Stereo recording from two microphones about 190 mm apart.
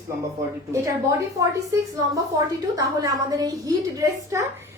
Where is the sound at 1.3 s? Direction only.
15° right (ahead or behind).